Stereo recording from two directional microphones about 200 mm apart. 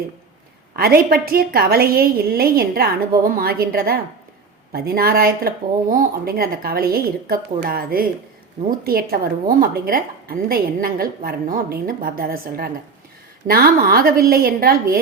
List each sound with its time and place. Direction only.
0.8 s a woman's voice: 50° right (ahead or behind)